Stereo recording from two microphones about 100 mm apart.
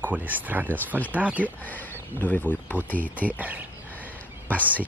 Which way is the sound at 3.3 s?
15° right (ahead or behind).